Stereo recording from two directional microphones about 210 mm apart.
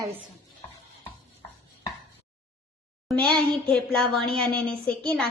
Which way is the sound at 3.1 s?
5° left (ahead or behind).